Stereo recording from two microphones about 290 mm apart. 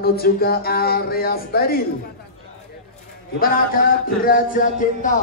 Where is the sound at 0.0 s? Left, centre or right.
Left.